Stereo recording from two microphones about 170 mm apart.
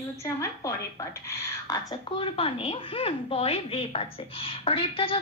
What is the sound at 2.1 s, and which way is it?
A woman's voice, 30° left (ahead or behind).